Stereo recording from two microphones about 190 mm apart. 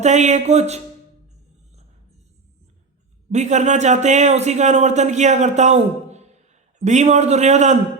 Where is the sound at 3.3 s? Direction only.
40° right (ahead or behind).